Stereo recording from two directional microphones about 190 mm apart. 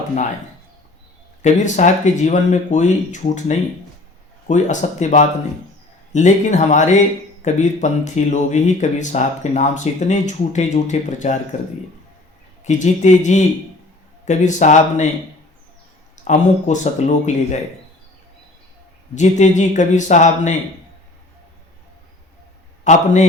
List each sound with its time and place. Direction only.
1.4 s speech: 40° left (ahead or behind)
12.6 s speech: 40° left (ahead or behind)
16.1 s speech: 40° left (ahead or behind)
19.1 s speech: 40° left (ahead or behind)
22.8 s a man's voice: 40° left (ahead or behind)